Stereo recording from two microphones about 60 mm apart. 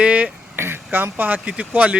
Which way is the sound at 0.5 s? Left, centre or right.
Right.